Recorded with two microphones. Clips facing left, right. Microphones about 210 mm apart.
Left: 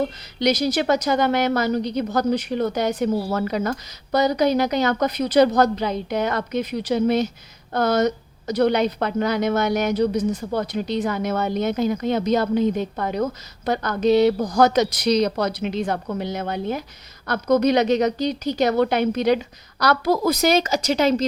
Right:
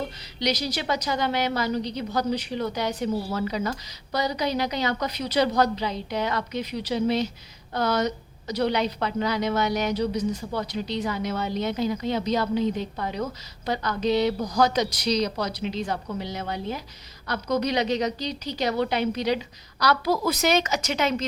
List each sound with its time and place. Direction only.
0.3 s a woman's voice: 50° left (ahead or behind); by 21.2 s 35° left (ahead or behind)